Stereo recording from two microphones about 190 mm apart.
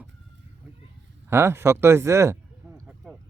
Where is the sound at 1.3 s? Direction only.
15° right (ahead or behind).